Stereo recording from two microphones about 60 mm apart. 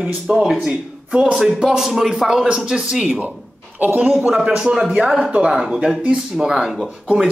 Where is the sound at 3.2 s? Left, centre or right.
Right.